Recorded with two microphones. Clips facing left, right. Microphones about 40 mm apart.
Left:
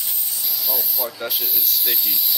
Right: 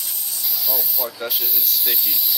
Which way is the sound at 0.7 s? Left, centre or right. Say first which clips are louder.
Even; centre.